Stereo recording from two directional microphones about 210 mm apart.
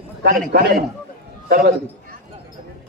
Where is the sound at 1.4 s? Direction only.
45° right (ahead or behind).